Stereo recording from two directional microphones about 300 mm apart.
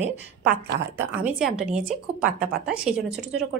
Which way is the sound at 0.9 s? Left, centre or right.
Centre.